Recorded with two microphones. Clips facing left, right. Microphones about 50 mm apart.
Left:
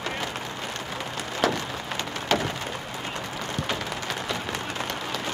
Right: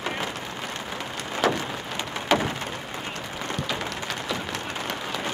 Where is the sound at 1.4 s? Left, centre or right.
Centre.